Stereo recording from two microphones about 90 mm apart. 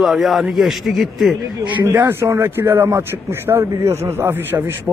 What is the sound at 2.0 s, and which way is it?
Speech, 30° right (ahead or behind).